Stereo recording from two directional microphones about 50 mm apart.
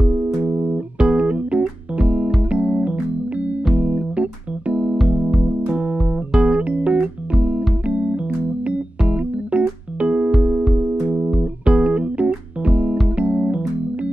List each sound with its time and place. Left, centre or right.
0.0 s music: right
1.0 s keyboard: right
2.5 s music: right
6.4 s music: right
7.3 s keyboard: right
9.1 s music: right
11.6 s keyboard: right
13.1 s music: right